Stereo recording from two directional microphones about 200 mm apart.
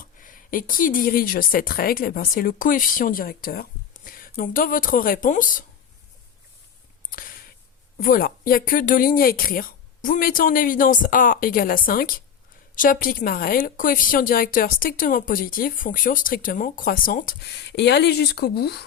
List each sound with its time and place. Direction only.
0.0 s speech: 45° left (ahead or behind)
7.1 s a sound: 45° left (ahead or behind)
7.9 s speech: 45° left (ahead or behind)